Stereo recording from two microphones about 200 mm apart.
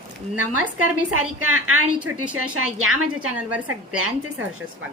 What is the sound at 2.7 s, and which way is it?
Speech, 90° right.